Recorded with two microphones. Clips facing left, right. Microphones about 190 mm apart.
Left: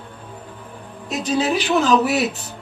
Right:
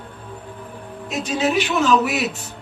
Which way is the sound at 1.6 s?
35° left (ahead or behind).